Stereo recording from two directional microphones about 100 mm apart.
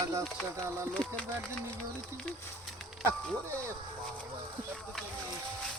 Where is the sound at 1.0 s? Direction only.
10° left (ahead or behind).